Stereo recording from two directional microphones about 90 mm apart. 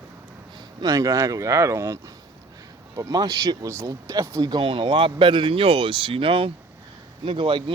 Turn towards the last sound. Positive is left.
turn(degrees=-70)  # may be behind; listen again after turning